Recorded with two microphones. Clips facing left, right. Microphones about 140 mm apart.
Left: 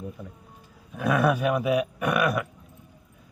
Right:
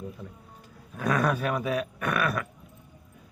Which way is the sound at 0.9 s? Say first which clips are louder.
Left 3 dB; 10° left (ahead or behind).